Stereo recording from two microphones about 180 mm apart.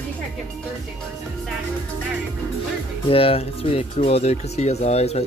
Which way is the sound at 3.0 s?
30° left (ahead or behind).